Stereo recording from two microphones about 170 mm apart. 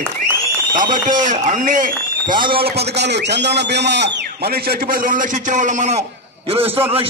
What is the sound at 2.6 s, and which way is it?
A man's voice, 75° right (ahead or behind).